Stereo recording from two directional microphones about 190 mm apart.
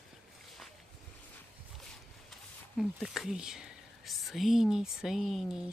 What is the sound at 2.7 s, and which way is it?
Speech, centre (ahead or behind).